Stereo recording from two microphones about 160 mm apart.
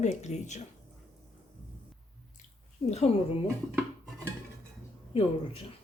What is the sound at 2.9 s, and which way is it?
Speech, 45° left (ahead or behind).